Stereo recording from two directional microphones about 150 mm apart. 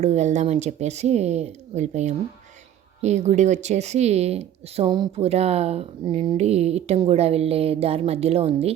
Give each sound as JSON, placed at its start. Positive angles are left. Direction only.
{"t": 0.0, "sound": "speech", "side_deg": -50}
{"t": 4.9, "sound": "speech", "side_deg": -30}
{"t": 5.2, "sound": "speech", "side_deg": -45}